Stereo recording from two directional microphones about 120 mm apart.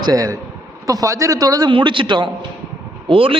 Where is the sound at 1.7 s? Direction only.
45° right (ahead or behind).